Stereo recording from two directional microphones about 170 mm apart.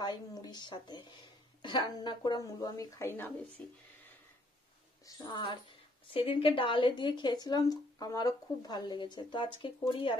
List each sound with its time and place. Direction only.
0.0 s a woman's voice: 25° left (ahead or behind)
5.0 s a woman's voice: 25° left (ahead or behind)